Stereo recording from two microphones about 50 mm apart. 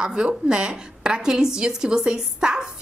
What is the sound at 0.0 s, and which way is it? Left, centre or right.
A woman's voice, centre.